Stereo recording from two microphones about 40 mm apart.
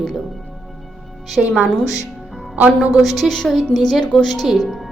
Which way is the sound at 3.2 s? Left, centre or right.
Centre.